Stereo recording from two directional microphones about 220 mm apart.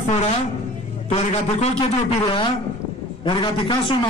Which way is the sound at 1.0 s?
30° left (ahead or behind).